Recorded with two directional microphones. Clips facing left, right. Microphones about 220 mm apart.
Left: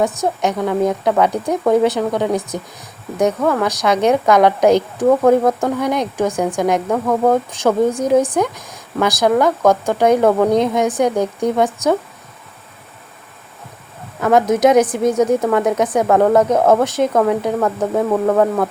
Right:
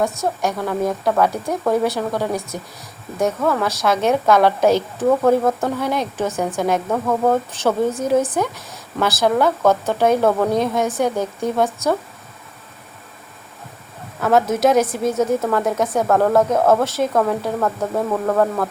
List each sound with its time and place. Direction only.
0.0 s a woman's voice: 20° left (ahead or behind)
14.3 s a woman's voice: 15° left (ahead or behind)